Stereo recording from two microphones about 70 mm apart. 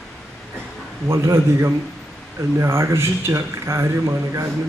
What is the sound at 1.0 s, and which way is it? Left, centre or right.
A man's voice, right.